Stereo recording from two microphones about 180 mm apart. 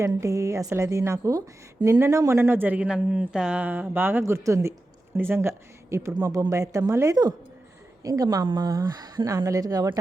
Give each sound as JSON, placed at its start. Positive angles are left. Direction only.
{"t": 0.0, "sound": "a woman's voice", "side_deg": -15}